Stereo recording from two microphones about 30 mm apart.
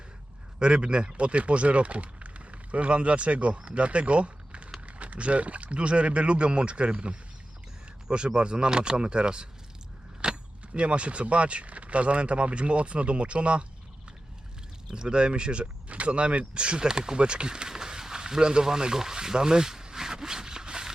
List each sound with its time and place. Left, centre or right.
0.6 s speech: right
8.4 s speech: right
10.2 s keys jangling: right
10.8 s speech: right
14.8 s speech: right
17.7 s a sound: right